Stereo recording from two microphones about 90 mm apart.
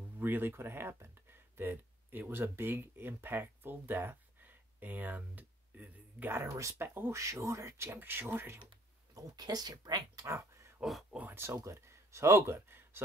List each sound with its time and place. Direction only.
0.2 s speech: 25° right (ahead or behind)
6.5 s speech: 35° right (ahead or behind)
9.1 s speech: 45° right (ahead or behind)
10.2 s a sound: 30° right (ahead or behind)
10.8 s speech: centre (ahead or behind)
11.1 s speech: 20° right (ahead or behind)